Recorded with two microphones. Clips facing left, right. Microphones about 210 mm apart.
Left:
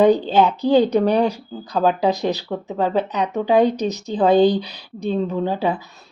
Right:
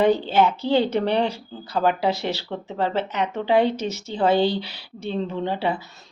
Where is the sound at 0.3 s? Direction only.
15° left (ahead or behind).